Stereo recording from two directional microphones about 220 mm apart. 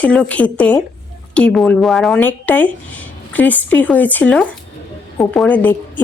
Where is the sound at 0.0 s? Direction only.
5° left (ahead or behind).